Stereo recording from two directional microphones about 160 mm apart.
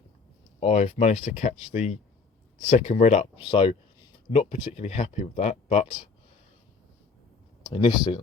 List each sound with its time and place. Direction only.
0.6 s speech: 45° left (ahead or behind)
7.7 s speech: 30° left (ahead or behind)